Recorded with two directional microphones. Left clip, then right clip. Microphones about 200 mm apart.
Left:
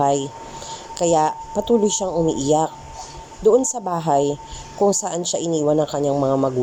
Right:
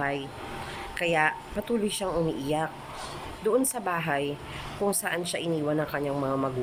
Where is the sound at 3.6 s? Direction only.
5° left (ahead or behind).